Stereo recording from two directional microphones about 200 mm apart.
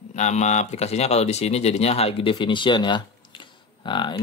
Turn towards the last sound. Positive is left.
turn(degrees=25)  # may be behind; listen again after turning